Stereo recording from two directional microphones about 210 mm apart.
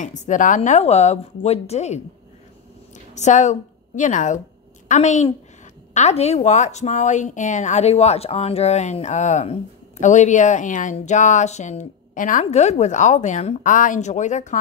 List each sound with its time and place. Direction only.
0.0 s speech: 35° left (ahead or behind)
3.2 s a woman's voice: 35° left (ahead or behind)